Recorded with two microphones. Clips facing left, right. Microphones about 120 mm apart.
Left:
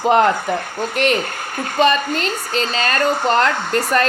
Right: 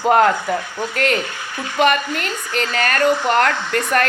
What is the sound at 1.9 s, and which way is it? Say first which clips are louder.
Speech: left 2 dB; 25° left (ahead or behind).